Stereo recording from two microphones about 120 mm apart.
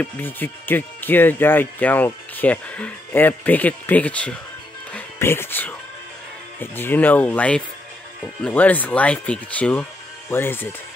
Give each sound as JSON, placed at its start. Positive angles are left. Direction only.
{"t": 0.0, "sound": "speech", "side_deg": 15}